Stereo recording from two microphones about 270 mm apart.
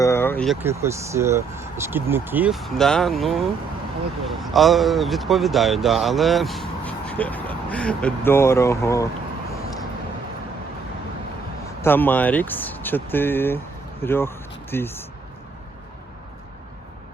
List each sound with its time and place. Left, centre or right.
0.0 s speech: centre
11.8 s speech: centre